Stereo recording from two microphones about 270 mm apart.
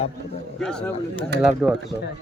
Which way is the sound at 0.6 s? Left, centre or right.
Centre.